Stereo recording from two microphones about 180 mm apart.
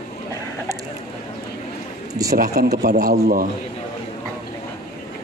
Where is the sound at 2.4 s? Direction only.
60° right (ahead or behind).